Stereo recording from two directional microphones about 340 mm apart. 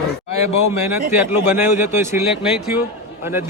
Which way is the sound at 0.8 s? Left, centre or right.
Centre.